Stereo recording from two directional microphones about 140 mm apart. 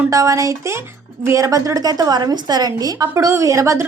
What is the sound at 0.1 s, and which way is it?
A woman's voice, 25° right (ahead or behind).